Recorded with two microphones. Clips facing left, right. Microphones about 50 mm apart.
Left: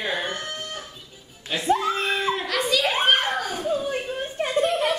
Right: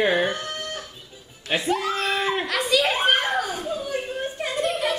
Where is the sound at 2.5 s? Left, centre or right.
Centre.